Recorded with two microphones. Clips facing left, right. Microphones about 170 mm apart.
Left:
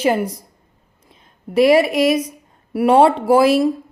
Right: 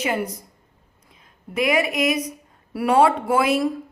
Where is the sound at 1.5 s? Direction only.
30° left (ahead or behind).